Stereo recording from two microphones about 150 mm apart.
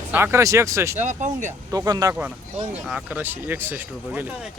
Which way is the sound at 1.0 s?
55° right (ahead or behind).